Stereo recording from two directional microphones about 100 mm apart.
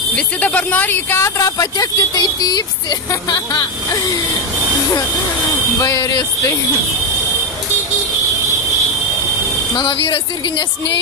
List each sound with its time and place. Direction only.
0.1 s speech: 15° left (ahead or behind)
1.4 s speech: 35° left (ahead or behind)
5.8 s speech: 30° left (ahead or behind)
9.8 s speech: 60° left (ahead or behind)